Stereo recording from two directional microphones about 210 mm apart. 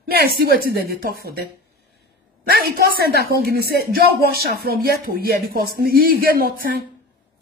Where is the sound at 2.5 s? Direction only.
45° right (ahead or behind).